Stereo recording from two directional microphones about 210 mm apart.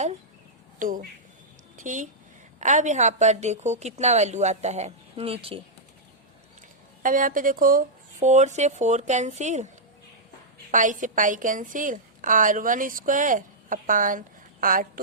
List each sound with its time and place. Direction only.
0.8 s a woman's voice: 40° right (ahead or behind)
1.7 s a sound: 35° right (ahead or behind)
2.6 s a woman's voice: 35° right (ahead or behind)
7.0 s a woman's voice: 40° right (ahead or behind)
10.7 s a woman's voice: 40° right (ahead or behind)